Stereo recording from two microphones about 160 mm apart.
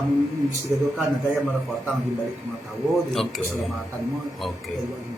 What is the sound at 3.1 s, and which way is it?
Speech, centre (ahead or behind).